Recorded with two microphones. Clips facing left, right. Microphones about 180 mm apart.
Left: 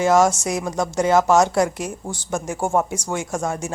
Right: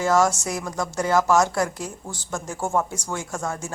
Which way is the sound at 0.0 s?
20° left (ahead or behind).